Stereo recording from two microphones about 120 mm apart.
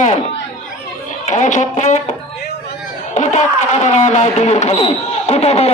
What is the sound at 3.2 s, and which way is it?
Speech, 75° left (ahead or behind).